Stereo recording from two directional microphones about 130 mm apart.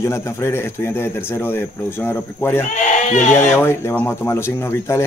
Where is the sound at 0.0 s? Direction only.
20° left (ahead or behind).